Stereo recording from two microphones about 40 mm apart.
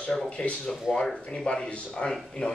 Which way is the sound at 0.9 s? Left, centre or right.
Centre.